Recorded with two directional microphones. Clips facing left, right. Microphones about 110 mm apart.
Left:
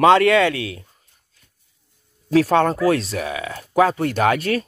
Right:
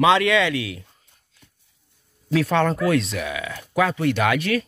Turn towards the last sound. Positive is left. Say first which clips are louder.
# left 2 dB
turn(degrees=40)  # may be behind; listen again after turning